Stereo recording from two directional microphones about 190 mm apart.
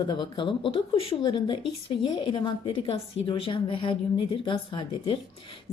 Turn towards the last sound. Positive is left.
turn(degrees=25)  # may be behind; listen again after turning